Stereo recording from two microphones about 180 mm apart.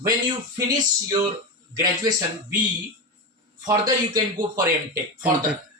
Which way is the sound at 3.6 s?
20° right (ahead or behind).